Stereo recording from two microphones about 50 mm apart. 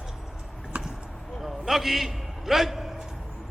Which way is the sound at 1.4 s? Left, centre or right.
Centre.